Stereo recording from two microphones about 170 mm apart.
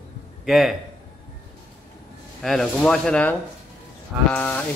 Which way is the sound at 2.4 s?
Centre (ahead or behind).